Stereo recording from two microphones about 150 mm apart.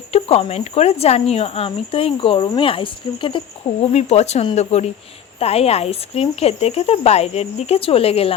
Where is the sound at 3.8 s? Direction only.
45° left (ahead or behind).